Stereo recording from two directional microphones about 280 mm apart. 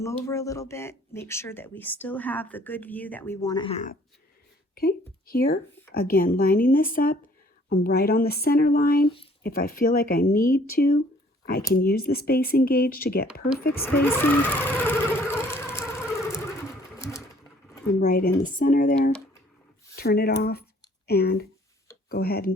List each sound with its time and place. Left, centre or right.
0.0 s speech: centre; by 13.2 s left
13.7 s speech: centre
14.6 s vehicle: centre
17.0 s sewing machine: centre
18.0 s speech: left
20.0 s speech: left